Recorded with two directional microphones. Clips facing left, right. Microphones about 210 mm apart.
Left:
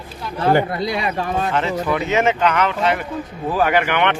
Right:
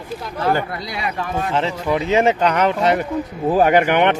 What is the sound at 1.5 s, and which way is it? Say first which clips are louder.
Speech: right 3 dB; 30° right (ahead or behind).